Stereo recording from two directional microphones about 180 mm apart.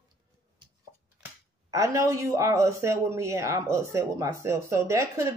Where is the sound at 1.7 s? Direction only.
15° right (ahead or behind).